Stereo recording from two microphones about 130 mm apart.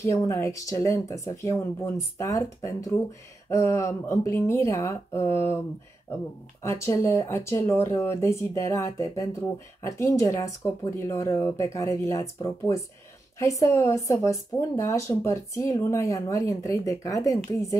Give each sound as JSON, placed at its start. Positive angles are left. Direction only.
{"t": 0.0, "sound": "speech", "side_deg": 25}
{"t": 6.6, "sound": "speech", "side_deg": 20}